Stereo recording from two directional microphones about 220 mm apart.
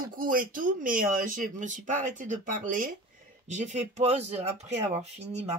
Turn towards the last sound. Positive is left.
turn(degrees=-30)  # may be behind; listen again after turning